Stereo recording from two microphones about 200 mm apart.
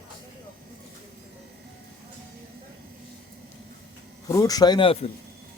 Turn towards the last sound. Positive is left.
turn(degrees=25)  # may be behind; listen again after turning